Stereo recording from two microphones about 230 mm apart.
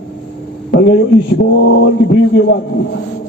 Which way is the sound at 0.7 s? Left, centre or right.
Left.